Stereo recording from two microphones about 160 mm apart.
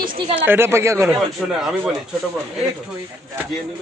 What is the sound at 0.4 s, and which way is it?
Speech, 15° right (ahead or behind).